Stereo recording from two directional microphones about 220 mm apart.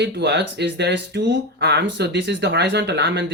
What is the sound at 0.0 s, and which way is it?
Speech, 50° right (ahead or behind).